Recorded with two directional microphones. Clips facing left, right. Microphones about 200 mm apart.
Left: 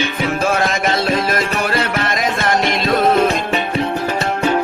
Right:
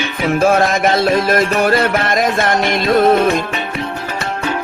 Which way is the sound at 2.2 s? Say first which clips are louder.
Right 2 dB; 50° right (ahead or behind).